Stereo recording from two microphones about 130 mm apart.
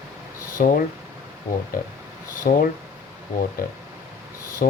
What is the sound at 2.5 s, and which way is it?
Speech, 85° left.